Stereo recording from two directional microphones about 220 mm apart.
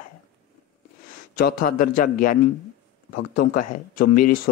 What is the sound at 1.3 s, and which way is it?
Speech, 40° left (ahead or behind).